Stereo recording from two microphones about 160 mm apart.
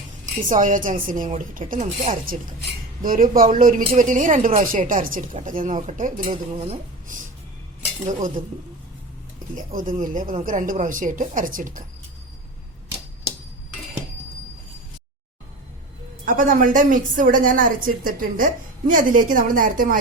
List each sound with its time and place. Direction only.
0.3 s a woman's voice: 55° right (ahead or behind)
9.6 s a woman's voice: 55° right (ahead or behind)
16.2 s a woman's voice: 60° right (ahead or behind)